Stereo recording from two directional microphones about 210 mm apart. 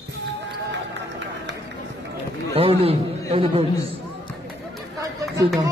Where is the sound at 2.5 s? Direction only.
30° right (ahead or behind).